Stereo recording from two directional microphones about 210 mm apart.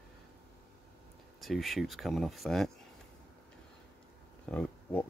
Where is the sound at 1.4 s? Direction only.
Centre (ahead or behind).